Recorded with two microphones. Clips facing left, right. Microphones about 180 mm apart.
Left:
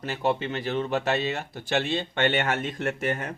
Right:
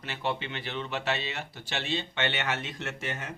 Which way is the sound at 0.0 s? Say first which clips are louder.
Left 7 dB; 40° left (ahead or behind).